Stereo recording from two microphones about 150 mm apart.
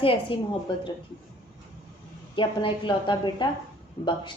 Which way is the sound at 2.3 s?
35° left (ahead or behind).